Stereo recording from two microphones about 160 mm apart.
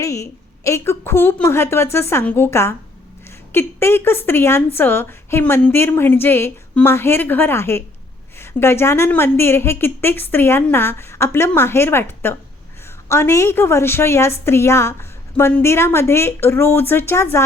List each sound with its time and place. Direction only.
0.0 s a woman's voice: 20° left (ahead or behind)